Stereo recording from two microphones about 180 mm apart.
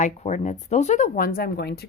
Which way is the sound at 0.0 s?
40° left (ahead or behind).